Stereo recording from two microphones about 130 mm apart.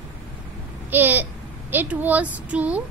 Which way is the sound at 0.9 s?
15° right (ahead or behind).